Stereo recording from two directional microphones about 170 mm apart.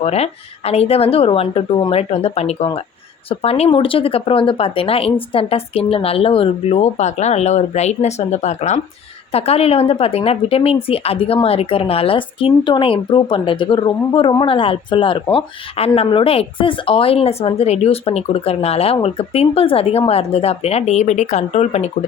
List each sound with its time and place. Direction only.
0.0 s speech: 35° left (ahead or behind)